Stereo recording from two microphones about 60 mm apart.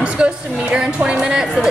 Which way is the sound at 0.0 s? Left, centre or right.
Centre.